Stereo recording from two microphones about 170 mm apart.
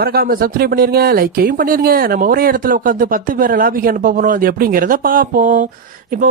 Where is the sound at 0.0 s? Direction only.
65° right (ahead or behind).